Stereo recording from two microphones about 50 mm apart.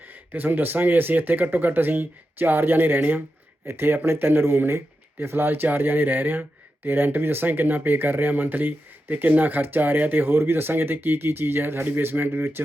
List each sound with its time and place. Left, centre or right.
0.1 s speech: right
3.7 s speech: right